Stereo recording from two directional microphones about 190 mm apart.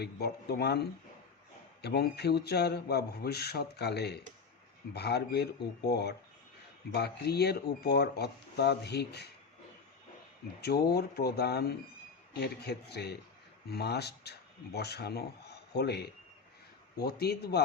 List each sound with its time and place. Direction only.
0.0 s speech: 60° left (ahead or behind)
10.6 s speech: 55° left (ahead or behind)